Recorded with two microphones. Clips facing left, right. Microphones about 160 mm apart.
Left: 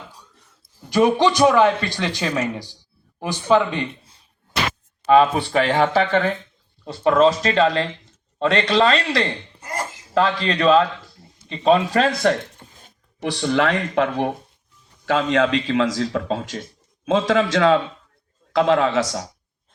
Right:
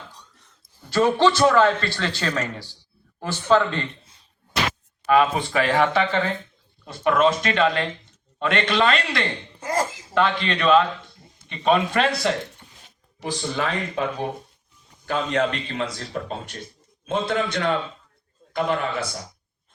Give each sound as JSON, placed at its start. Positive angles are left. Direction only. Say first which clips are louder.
{"t": 0.9, "sound": "speech", "louder": "left 2 dB", "side_deg": 15}
{"t": 5.0, "sound": "speech", "louder": "left 4 dB", "side_deg": 30}
{"t": 9.6, "sound": "a sound", "louder": "right 5 dB", "side_deg": -90}
{"t": 10.2, "sound": "speech", "louder": "left 3 dB", "side_deg": 35}
{"t": 12.2, "sound": "a sound", "louder": "left 5 dB", "side_deg": 45}
{"t": 13.2, "sound": "speech", "louder": "left 7 dB", "side_deg": 70}
{"t": 15.0, "sound": "speech", "louder": "left 4 dB", "side_deg": 90}